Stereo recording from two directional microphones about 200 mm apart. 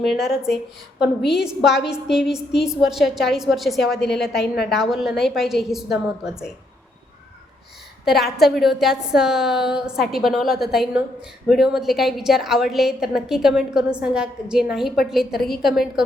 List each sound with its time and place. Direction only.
0.3 s a woman's voice: centre (ahead or behind)
4.3 s a woman's voice: 55° left (ahead or behind)
4.7 s a woman's voice: centre (ahead or behind)
8.4 s a woman's voice: centre (ahead or behind)